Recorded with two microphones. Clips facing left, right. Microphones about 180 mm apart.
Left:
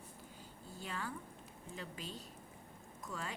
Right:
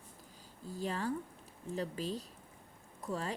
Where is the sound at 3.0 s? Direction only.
35° right (ahead or behind).